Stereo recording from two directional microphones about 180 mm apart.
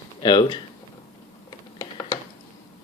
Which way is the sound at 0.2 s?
25° left (ahead or behind).